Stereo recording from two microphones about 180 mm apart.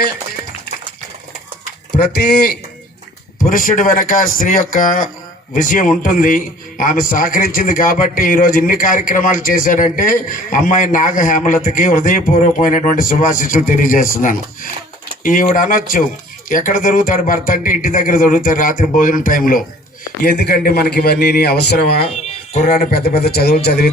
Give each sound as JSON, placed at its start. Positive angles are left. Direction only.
{"t": 2.0, "sound": "a man's voice", "side_deg": 60}
{"t": 3.5, "sound": "a man's voice", "side_deg": 50}
{"t": 20.2, "sound": "a man's voice", "side_deg": 60}
{"t": 22.0, "sound": "a man's voice", "side_deg": 35}